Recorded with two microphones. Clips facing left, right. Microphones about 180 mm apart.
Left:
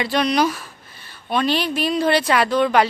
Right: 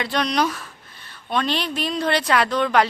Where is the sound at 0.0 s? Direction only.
5° left (ahead or behind).